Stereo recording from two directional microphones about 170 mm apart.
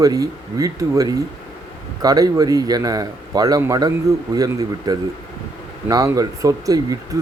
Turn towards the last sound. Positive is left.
turn(degrees=-20)  # may be behind; listen again after turning